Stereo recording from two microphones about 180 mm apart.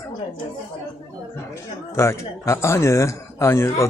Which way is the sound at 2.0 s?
15° left (ahead or behind).